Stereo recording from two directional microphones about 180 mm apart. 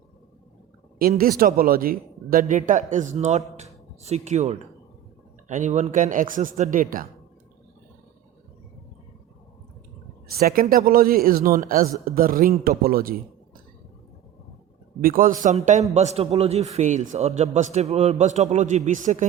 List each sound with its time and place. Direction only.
0.9 s a man's voice: 55° right (ahead or behind)
10.3 s speech: 55° right (ahead or behind)
15.0 s a man's voice: 50° right (ahead or behind)